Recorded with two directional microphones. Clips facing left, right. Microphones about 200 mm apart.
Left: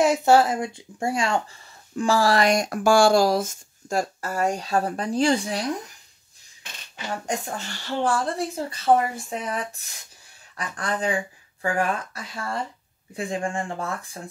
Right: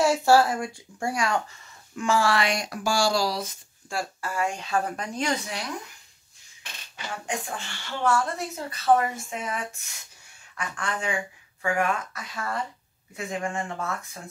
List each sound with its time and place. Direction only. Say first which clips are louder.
0.0 s speech: left 2 dB; 20° left (ahead or behind)
7.2 s speech: left 1 dB; 40° left (ahead or behind)